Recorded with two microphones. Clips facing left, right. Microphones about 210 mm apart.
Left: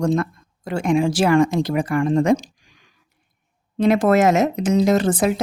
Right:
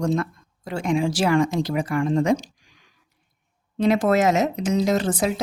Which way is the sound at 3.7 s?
55° left (ahead or behind).